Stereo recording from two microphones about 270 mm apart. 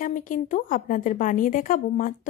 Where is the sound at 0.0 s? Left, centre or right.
Left.